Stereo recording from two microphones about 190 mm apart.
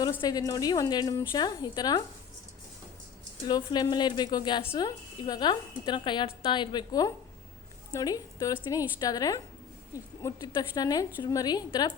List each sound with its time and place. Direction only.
0.0 s a woman's voice: 20° left (ahead or behind)
3.4 s a woman's voice: 20° left (ahead or behind)